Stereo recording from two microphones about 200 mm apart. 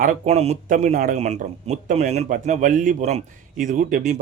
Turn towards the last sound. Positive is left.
turn(degrees=-40)  # may be behind; listen again after turning